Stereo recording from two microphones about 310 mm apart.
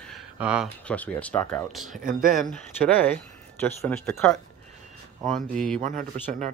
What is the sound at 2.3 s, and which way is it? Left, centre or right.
Speech, centre.